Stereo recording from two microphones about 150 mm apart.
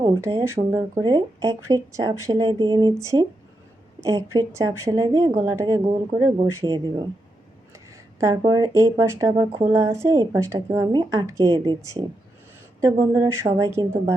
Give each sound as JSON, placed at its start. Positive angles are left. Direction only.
{"t": 0.0, "sound": "a sound", "side_deg": -25}
{"t": 0.4, "sound": "speech", "side_deg": -20}
{"t": 8.2, "sound": "speech", "side_deg": -20}
{"t": 9.6, "sound": "speech", "side_deg": -15}
{"t": 12.8, "sound": "a woman's voice", "side_deg": -15}